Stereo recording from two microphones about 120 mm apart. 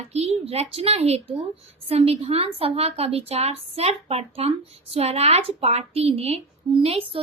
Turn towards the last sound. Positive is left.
turn(degrees=-50)  # may be behind; listen again after turning